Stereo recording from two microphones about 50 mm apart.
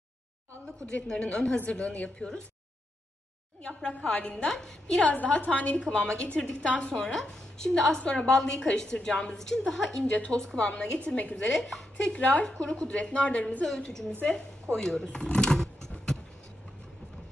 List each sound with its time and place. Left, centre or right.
1.0 s a woman's voice: centre
3.6 s a woman's voice: centre
4.5 s a woman's voice: centre
5.0 s a woman's voice: left; by 9.9 s centre
10.0 s a woman's voice: left
12.2 s a woman's voice: left
12.4 s a woman's voice: centre
13.7 s a woman's voice: centre